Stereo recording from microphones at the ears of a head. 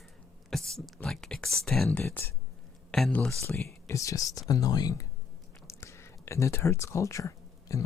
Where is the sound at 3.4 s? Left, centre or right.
Left.